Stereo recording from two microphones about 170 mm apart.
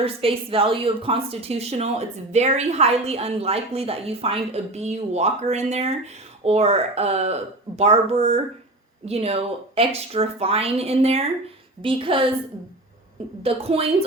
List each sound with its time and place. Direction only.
0.0 s a woman's voice: 35° right (ahead or behind)
13.4 s a woman's voice: 35° right (ahead or behind)